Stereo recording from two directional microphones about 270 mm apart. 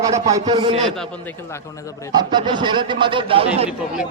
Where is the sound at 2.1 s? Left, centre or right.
Centre.